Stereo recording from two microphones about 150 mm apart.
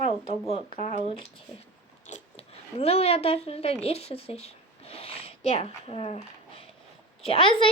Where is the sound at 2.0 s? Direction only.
45° left (ahead or behind).